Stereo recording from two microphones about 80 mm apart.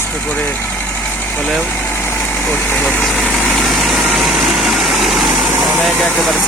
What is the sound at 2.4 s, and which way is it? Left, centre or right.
Speech, left.